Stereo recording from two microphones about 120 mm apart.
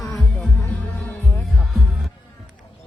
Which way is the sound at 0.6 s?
15° left (ahead or behind).